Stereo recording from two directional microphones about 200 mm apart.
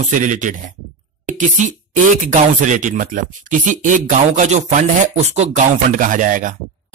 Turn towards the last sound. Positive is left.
turn(degrees=-40)  # may be behind; listen again after turning